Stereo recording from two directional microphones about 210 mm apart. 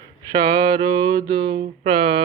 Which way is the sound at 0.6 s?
25° right (ahead or behind).